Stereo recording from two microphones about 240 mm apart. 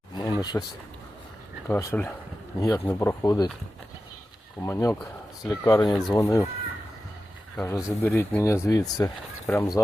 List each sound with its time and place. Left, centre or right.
0.2 s a sound: centre
1.6 s speech: centre
4.6 s speech: centre
7.5 s speech: centre